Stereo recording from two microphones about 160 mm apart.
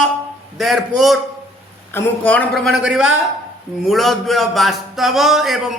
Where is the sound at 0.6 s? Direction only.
Centre (ahead or behind).